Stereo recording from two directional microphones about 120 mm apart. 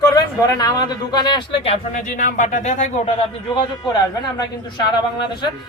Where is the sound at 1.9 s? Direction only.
90° left.